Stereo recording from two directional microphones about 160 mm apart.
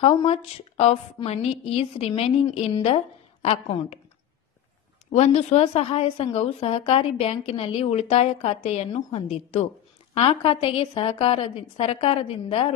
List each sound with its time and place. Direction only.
0.0 s a woman's voice: 40° left (ahead or behind)
5.1 s a woman's voice: 45° left (ahead or behind)